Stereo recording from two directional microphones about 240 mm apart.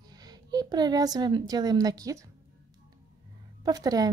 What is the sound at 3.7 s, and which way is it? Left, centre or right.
Speech, centre.